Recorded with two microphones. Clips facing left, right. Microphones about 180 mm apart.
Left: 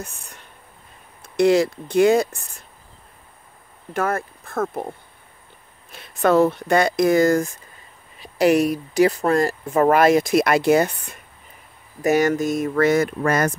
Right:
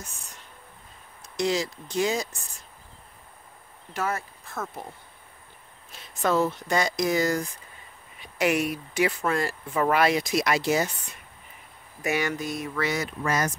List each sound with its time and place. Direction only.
0.0 s speech: 60° left (ahead or behind)
3.9 s speech: 55° left (ahead or behind)
8.2 s speech: 35° left (ahead or behind); by 11.1 s 55° left (ahead or behind)
12.0 s speech: 40° left (ahead or behind)